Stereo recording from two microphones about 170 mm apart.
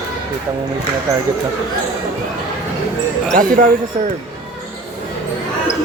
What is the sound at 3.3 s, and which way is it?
Speech, 55° right (ahead or behind).